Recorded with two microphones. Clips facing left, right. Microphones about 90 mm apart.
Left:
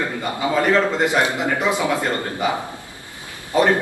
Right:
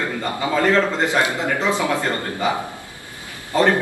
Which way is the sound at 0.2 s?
15° left (ahead or behind).